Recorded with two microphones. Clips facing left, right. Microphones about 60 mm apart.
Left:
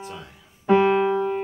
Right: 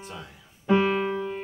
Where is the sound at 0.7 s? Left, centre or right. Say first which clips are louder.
Left 5 dB; left.